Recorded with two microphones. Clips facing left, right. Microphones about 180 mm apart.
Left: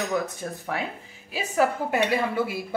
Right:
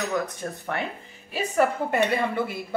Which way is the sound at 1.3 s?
5° left (ahead or behind).